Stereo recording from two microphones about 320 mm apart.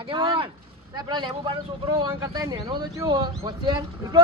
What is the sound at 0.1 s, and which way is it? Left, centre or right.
Speech, centre.